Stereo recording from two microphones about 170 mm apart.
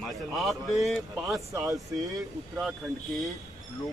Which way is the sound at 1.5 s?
20° right (ahead or behind).